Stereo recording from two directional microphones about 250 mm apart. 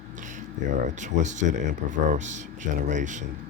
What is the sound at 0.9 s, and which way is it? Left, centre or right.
Speech, right.